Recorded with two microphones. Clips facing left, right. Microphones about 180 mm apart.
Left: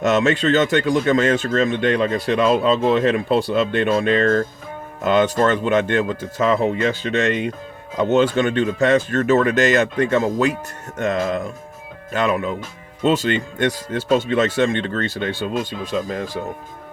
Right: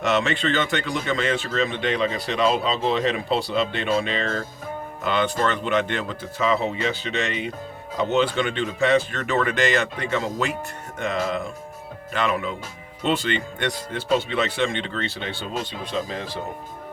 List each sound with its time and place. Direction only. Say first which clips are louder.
0.1 s speech: left 5 dB; 45° left (ahead or behind)